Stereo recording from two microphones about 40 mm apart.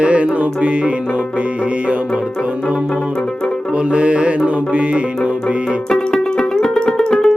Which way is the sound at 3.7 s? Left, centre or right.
Right.